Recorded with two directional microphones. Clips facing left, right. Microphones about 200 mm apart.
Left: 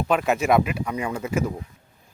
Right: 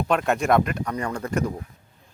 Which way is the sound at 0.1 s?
5° left (ahead or behind).